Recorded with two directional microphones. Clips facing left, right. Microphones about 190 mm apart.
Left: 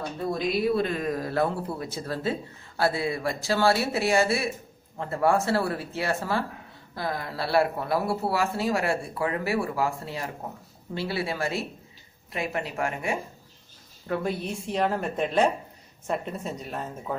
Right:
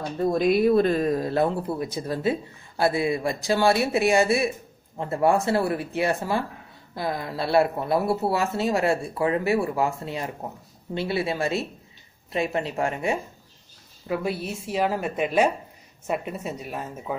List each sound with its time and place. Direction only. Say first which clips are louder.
0.3 s speech: right 6 dB; 45° right (ahead or behind); by 13.2 s 25° right (ahead or behind)
14.0 s speech: right 1 dB; 5° right (ahead or behind)